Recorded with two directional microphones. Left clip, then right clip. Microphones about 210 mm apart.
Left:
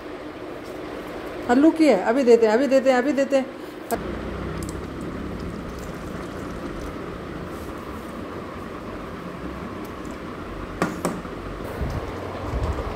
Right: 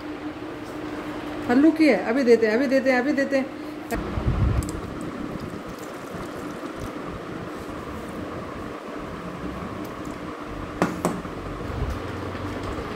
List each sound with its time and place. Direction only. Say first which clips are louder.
1.5 s a woman's voice: left 1 dB; 15° left (ahead or behind)